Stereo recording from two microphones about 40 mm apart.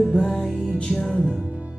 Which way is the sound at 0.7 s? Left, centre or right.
Left.